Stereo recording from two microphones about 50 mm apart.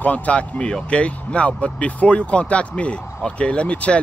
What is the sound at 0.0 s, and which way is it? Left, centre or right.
Speech, left.